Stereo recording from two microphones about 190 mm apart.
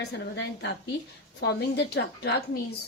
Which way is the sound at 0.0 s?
70° left (ahead or behind).